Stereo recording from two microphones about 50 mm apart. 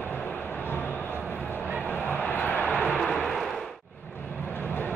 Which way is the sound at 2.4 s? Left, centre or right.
Left.